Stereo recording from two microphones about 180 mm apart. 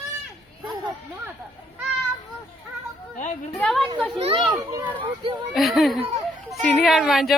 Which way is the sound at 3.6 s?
Centre (ahead or behind).